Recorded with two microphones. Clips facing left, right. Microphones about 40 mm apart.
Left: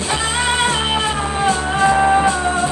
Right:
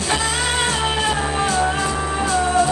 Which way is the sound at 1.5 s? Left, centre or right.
Left.